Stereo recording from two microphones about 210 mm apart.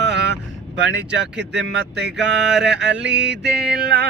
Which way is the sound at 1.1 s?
55° right (ahead or behind).